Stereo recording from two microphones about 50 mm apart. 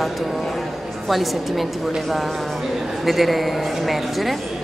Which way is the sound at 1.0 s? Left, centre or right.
Centre.